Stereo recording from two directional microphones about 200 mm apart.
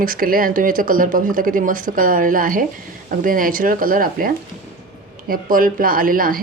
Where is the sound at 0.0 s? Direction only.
45° right (ahead or behind).